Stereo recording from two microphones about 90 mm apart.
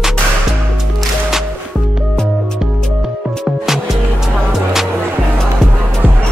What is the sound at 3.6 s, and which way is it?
Music, 5° right (ahead or behind).